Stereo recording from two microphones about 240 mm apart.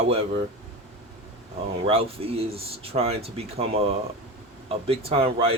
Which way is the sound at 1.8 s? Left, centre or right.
Right.